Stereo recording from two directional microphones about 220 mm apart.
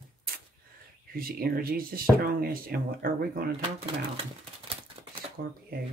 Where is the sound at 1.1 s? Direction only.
40° right (ahead or behind).